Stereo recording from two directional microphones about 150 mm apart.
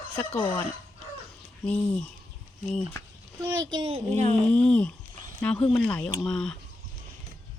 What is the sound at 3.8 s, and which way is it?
Speech, 40° right (ahead or behind).